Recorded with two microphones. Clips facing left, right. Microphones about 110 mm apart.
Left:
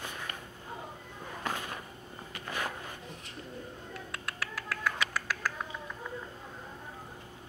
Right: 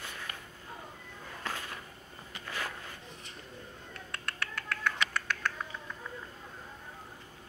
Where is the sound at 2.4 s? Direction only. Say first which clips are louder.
Left 3 dB; 20° left (ahead or behind).